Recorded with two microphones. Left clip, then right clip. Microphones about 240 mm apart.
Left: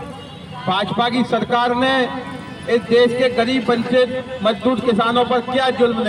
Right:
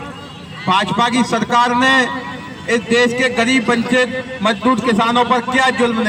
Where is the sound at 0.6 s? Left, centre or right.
Right.